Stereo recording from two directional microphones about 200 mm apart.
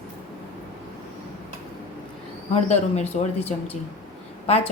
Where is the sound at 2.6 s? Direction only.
35° left (ahead or behind).